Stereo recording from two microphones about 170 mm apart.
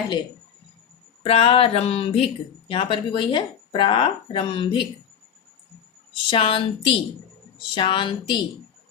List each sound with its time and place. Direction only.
1.2 s speech: 35° left (ahead or behind)
6.3 s a woman's voice: 30° left (ahead or behind)